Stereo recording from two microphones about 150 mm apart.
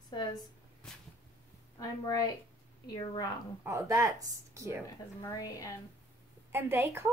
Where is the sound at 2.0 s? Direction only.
25° left (ahead or behind).